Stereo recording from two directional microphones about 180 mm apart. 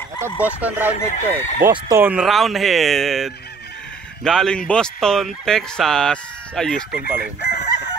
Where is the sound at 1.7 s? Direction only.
20° right (ahead or behind).